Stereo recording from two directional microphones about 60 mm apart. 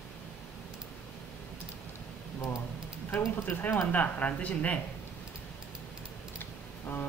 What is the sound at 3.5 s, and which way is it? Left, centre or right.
A woman's voice, left.